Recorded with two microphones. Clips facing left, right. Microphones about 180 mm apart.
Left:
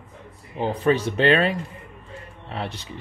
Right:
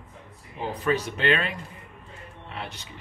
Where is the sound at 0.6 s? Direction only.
25° left (ahead or behind).